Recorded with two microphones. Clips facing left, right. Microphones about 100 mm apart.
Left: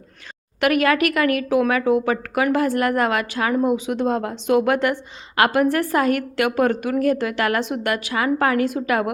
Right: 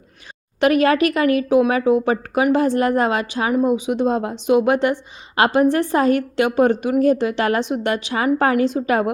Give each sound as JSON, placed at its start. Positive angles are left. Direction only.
{"t": 0.6, "sound": "a woman's voice", "side_deg": -25}